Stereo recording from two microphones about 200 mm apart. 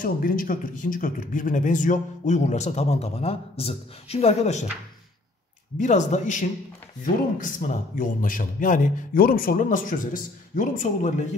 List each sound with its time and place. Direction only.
0.0 s a man's voice: 45° left (ahead or behind)
5.8 s a man's voice: 35° left (ahead or behind)